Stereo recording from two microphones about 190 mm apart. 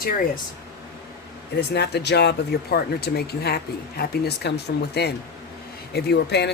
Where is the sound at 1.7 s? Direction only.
60° left (ahead or behind).